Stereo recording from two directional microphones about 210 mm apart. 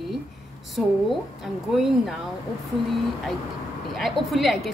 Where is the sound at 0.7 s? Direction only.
Centre (ahead or behind).